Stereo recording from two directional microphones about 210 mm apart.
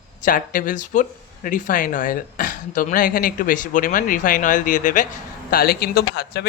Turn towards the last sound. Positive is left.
turn(degrees=50)  # may be behind; listen again after turning